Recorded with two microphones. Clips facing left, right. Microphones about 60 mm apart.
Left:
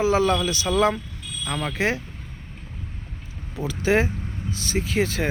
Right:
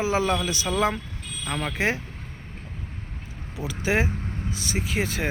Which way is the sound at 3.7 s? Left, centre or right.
Centre.